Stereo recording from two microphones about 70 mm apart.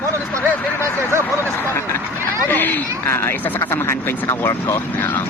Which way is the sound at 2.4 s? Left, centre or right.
Left.